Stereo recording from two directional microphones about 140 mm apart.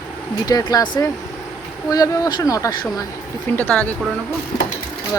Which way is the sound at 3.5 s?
15° left (ahead or behind).